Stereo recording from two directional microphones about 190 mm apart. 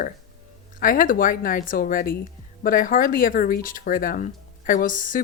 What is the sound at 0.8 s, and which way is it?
Speech, 45° left (ahead or behind).